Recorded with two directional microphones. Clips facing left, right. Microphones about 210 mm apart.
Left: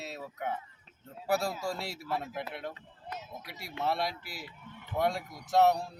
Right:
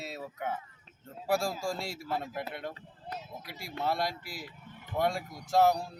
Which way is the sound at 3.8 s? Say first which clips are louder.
Even; centre (ahead or behind).